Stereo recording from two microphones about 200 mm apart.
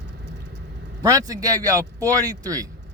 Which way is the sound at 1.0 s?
15° right (ahead or behind).